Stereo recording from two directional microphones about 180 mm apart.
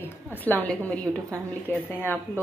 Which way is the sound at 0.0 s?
10° left (ahead or behind).